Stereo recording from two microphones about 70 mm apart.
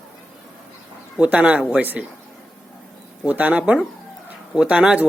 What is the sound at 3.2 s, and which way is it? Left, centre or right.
A man's voice, right.